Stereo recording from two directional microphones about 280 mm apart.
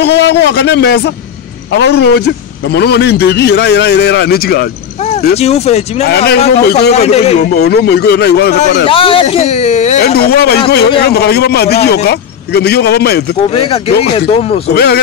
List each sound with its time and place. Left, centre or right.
0.0 s a man's voice: left
5.4 s speech: left
6.0 s a man's voice: left
6.9 s speech: left
7.5 s a man's voice: left
8.8 s a man's voice: centre; by 13.2 s left
13.5 s speech: centre
14.7 s a man's voice: left